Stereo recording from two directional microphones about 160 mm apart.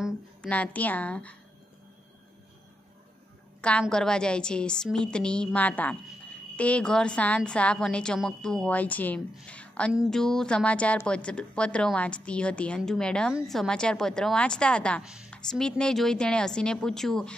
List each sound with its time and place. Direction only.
0.4 s a woman's voice: 10° left (ahead or behind)
3.8 s a woman's voice: 5° left (ahead or behind)
15.0 s a woman's voice: 5° right (ahead or behind)